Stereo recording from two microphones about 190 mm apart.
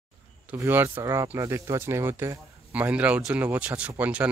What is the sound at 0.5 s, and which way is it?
Speech, 10° right (ahead or behind).